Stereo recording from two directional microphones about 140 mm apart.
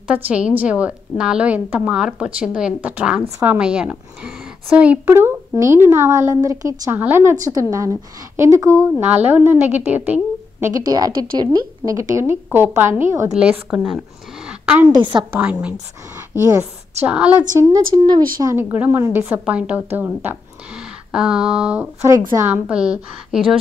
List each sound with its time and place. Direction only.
0.1 s a woman's voice: 10° right (ahead or behind)
10.9 s a woman's voice: 30° right (ahead or behind)
13.3 s a woman's voice: 10° right (ahead or behind)
15.0 s a woman's voice: 35° right (ahead or behind)
15.3 s a woman's voice: 10° right (ahead or behind)
17.0 s a woman's voice: 10° right (ahead or behind)
17.6 s a woman's voice: 30° right (ahead or behind)
18.4 s a woman's voice: 20° right (ahead or behind)
22.3 s a woman's voice: 20° right (ahead or behind)
22.7 s a woman's voice: 5° right (ahead or behind)